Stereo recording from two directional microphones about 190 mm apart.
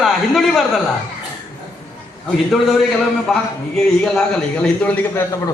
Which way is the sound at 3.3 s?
Centre (ahead or behind).